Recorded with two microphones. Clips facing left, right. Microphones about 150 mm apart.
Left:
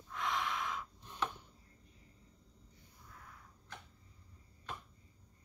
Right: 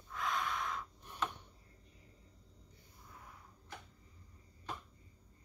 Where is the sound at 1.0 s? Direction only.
15° right (ahead or behind).